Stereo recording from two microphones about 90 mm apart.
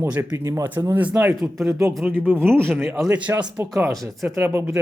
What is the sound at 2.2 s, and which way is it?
Speech, 25° right (ahead or behind).